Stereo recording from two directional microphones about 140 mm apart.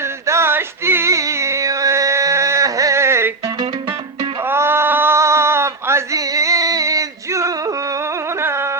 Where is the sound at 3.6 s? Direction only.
35° right (ahead or behind).